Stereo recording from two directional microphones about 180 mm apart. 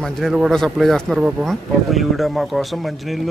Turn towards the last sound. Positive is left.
turn(degrees=0)  # may be behind; listen again after turning